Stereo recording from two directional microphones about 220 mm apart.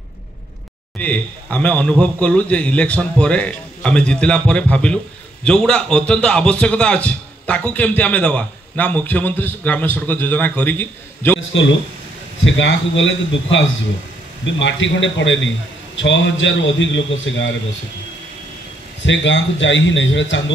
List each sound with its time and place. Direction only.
0.9 s a man's voice: 5° left (ahead or behind)
11.5 s a man's voice: 55° left (ahead or behind)
19.0 s a man's voice: 55° left (ahead or behind)